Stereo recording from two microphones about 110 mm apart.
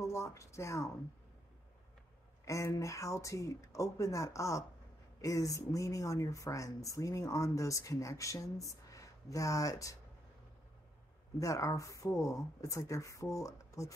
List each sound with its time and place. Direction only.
0.0 s speech: 25° left (ahead or behind)
2.4 s speech: 30° left (ahead or behind)
11.3 s speech: 30° left (ahead or behind)